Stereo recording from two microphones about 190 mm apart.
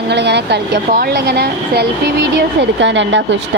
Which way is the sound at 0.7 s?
45° right (ahead or behind).